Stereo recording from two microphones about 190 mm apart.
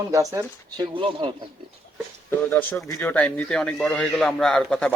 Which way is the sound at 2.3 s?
10° left (ahead or behind).